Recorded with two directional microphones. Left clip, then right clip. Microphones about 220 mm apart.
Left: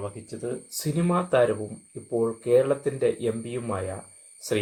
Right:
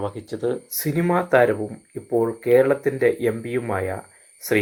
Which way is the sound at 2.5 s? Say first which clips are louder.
Right 5 dB; 15° right (ahead or behind).